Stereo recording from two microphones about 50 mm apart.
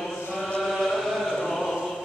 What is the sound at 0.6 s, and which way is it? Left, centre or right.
Chant, centre.